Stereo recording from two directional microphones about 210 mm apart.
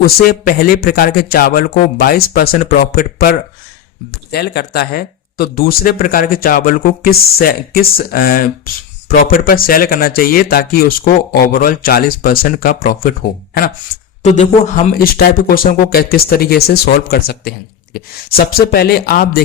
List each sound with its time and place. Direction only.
0.0 s speech: 45° left (ahead or behind)
14.2 s speech: 35° left (ahead or behind)